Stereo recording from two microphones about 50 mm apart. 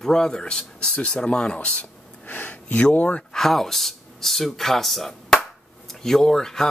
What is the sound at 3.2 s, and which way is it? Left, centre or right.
Speech, centre.